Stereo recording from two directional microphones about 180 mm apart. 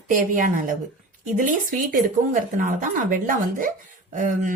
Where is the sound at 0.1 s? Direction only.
50° right (ahead or behind).